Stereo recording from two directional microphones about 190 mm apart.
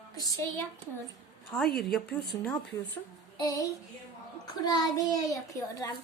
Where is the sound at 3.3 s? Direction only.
20° left (ahead or behind).